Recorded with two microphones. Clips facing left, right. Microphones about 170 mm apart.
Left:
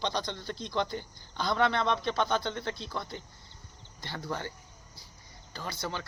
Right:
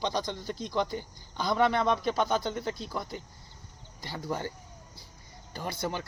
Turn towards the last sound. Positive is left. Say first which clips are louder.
# right 3 dB
turn(degrees=-15)  # may be behind; listen again after turning